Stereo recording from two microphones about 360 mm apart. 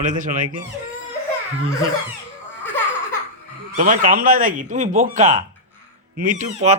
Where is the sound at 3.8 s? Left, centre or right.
Right.